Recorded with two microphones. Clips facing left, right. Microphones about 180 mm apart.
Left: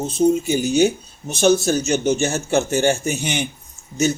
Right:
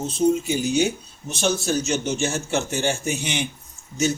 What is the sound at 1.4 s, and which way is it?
Speech, 45° left (ahead or behind).